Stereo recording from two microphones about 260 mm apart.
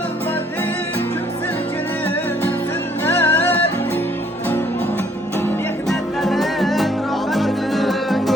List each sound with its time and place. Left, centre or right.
3.1 s music: centre
5.9 s music: centre